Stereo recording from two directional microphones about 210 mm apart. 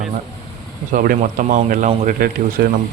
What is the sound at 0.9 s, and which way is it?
Speech, 40° right (ahead or behind).